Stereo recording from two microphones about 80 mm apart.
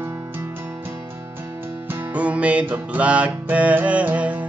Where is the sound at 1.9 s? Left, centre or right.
Right.